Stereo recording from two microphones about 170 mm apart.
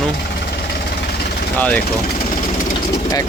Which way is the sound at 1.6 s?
10° left (ahead or behind).